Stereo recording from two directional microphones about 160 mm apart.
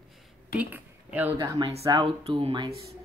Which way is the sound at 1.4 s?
25° right (ahead or behind).